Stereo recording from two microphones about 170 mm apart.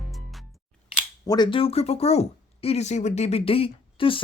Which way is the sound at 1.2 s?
25° left (ahead or behind).